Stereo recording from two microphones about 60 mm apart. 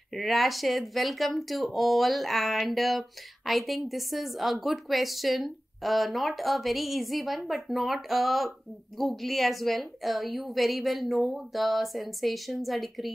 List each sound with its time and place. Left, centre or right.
0.1 s speech: centre